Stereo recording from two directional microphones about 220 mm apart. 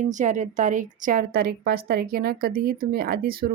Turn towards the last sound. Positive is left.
turn(degrees=-45)  # may be behind; listen again after turning